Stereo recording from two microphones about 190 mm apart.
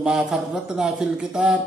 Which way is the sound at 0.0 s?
Centre (ahead or behind).